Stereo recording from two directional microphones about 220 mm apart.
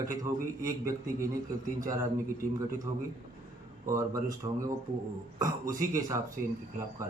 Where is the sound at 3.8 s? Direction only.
15° right (ahead or behind).